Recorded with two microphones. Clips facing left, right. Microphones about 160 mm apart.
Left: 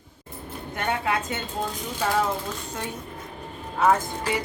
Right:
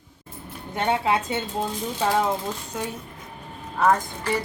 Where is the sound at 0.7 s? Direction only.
25° right (ahead or behind).